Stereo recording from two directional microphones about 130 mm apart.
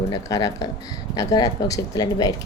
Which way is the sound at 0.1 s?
25° left (ahead or behind).